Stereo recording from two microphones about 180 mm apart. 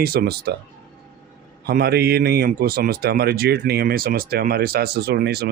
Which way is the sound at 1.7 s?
60° right (ahead or behind).